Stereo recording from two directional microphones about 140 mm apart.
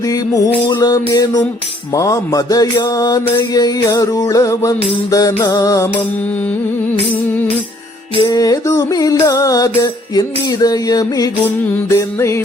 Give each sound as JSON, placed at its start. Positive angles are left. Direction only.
{"t": 0.3, "sound": "mantra", "side_deg": 25}
{"t": 8.3, "sound": "mantra", "side_deg": 25}